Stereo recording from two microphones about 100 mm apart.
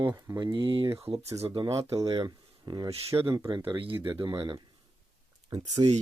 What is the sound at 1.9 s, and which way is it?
Speech, 35° right (ahead or behind).